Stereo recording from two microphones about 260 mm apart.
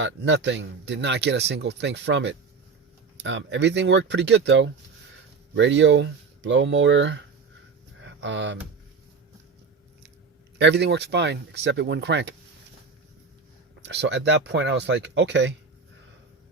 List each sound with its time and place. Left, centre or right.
0.0 s speech: right
8.0 s a sound: right
10.6 s speech: right
13.8 s speech: right